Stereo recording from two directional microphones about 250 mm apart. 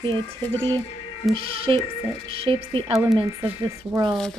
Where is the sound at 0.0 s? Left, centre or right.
Centre.